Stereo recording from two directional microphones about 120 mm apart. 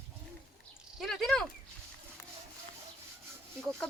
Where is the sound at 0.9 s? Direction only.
Centre (ahead or behind).